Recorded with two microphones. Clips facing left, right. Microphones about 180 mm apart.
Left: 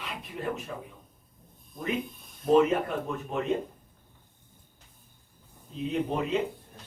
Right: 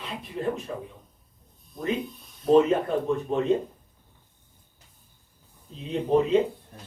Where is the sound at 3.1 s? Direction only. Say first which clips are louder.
Right 7 dB; 30° right (ahead or behind).